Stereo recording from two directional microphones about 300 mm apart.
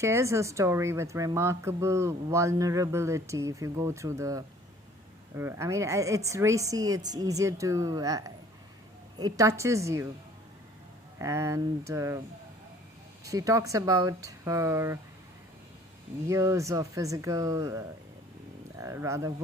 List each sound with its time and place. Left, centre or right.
0.0 s speech: centre
11.2 s speech: centre
13.2 s speech: centre
16.2 s speech: centre